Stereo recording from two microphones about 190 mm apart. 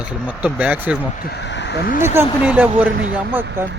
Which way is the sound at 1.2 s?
65° left (ahead or behind).